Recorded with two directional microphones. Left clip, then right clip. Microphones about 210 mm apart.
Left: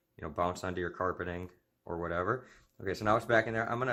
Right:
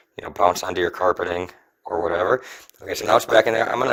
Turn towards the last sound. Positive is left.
turn(degrees=-55)  # may be behind; listen again after turning